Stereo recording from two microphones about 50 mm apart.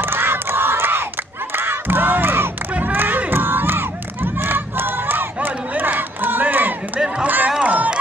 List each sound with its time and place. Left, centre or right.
0.0 s crowd: right
7.2 s a sound: right
7.6 s music: right